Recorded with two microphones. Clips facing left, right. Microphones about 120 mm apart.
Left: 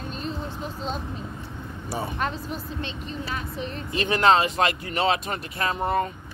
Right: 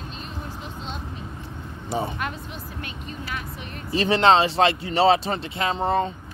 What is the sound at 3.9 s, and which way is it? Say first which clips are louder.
Speech: right 2 dB; 30° right (ahead or behind).